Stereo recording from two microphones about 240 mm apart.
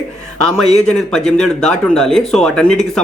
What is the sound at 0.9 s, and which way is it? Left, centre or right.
Speech, centre.